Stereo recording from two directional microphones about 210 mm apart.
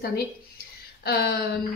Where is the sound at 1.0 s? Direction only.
50° left (ahead or behind).